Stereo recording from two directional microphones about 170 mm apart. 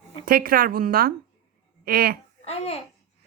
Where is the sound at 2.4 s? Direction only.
35° left (ahead or behind).